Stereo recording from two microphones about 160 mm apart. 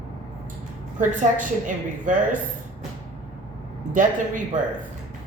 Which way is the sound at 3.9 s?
55° right (ahead or behind).